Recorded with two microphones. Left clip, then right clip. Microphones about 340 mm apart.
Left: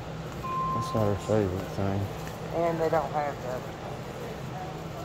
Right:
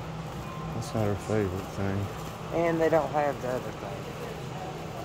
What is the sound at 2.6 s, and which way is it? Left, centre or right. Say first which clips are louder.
Speech: right 2 dB; right.